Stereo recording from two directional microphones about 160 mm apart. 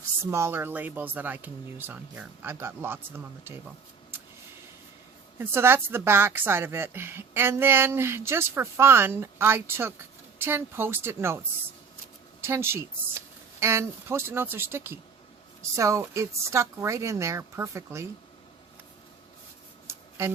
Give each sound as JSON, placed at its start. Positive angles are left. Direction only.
{"t": 0.3, "sound": "a woman's voice", "side_deg": -15}
{"t": 5.4, "sound": "a woman's voice", "side_deg": -15}
{"t": 12.4, "sound": "a woman's voice", "side_deg": -15}
{"t": 19.9, "sound": "a sound", "side_deg": -15}